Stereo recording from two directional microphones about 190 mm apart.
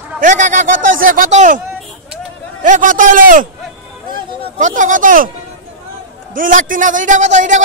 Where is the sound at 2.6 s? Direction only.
40° right (ahead or behind).